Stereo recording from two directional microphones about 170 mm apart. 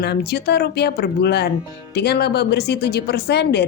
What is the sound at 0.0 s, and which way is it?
A woman's voice, 70° left (ahead or behind).